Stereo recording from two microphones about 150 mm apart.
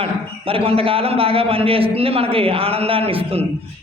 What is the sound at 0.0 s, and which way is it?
A man's voice, 40° right (ahead or behind).